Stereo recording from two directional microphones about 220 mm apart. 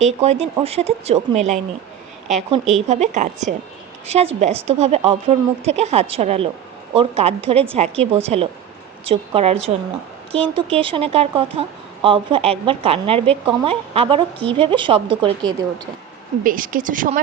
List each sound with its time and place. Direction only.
0.0 s a woman's voice: 30° right (ahead or behind)
16.4 s a woman's voice: 40° right (ahead or behind)